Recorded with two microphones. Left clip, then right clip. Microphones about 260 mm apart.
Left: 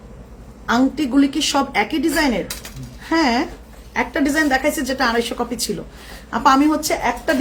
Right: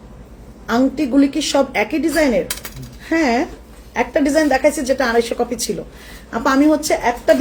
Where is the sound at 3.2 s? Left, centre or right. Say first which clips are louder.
Right 1 dB; right.